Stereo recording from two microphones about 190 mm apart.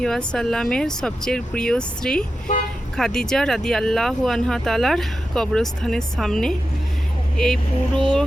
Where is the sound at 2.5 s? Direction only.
40° left (ahead or behind).